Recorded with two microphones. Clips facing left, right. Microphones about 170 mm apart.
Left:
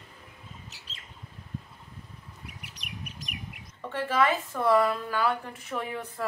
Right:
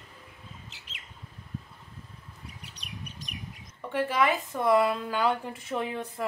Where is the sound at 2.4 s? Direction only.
30° right (ahead or behind).